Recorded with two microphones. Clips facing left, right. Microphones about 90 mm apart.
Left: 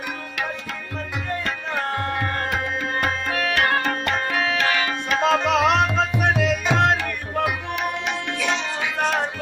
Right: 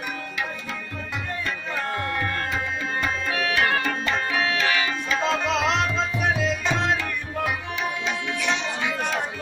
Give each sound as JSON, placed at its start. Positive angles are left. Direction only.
{"t": 1.4, "sound": "tabla", "side_deg": 55}